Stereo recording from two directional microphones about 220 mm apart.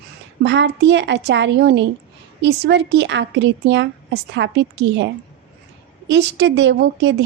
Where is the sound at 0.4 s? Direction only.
55° right (ahead or behind).